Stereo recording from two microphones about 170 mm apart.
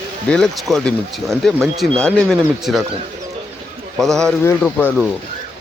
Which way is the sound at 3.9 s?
Centre (ahead or behind).